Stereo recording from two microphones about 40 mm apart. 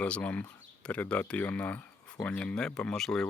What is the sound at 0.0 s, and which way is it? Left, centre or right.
Speech, left.